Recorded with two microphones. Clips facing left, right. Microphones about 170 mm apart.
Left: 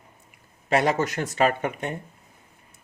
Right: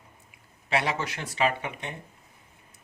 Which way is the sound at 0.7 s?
45° left (ahead or behind).